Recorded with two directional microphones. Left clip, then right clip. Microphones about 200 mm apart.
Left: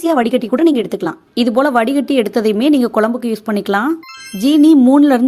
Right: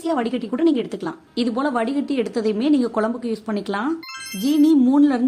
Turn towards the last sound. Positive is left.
turn(degrees=35)  # may be behind; listen again after turning